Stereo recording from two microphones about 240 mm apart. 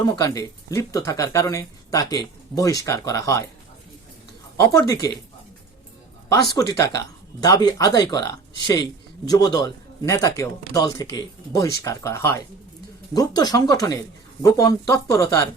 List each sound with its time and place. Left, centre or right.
0.0 s speech: centre
4.5 s speech: centre
6.2 s speech: centre